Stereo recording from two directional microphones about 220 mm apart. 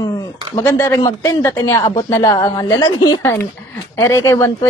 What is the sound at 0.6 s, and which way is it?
Speech, 10° left (ahead or behind).